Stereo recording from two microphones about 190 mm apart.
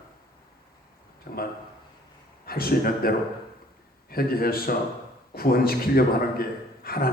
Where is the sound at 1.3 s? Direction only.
50° left (ahead or behind).